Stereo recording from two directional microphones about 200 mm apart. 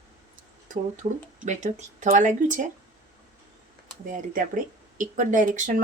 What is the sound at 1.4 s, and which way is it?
Speech, 35° right (ahead or behind).